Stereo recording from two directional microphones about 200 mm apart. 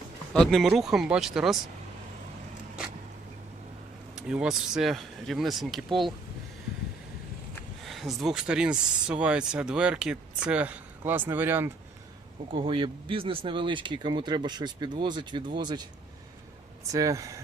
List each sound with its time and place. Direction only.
0.3 s speech: centre (ahead or behind)
4.1 s speech: 5° right (ahead or behind)
7.9 s speech: centre (ahead or behind)
12.5 s speech: 25° right (ahead or behind)
16.9 s speech: 15° right (ahead or behind)